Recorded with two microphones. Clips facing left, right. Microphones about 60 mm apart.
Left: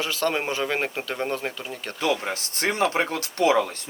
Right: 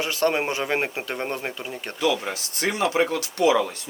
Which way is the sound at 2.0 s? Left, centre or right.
Left.